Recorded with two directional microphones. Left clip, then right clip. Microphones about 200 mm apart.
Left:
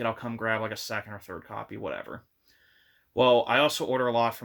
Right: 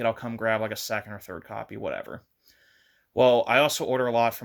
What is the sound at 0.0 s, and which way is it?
Speech, 45° right (ahead or behind).